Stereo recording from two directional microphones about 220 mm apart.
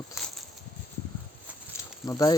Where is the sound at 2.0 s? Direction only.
15° left (ahead or behind).